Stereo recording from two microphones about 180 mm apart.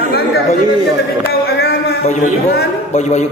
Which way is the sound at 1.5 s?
60° left (ahead or behind).